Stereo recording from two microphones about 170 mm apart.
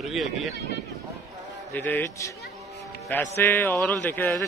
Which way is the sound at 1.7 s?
10° left (ahead or behind).